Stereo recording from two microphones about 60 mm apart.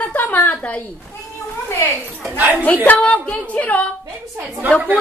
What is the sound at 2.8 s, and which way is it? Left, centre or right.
Speech, left.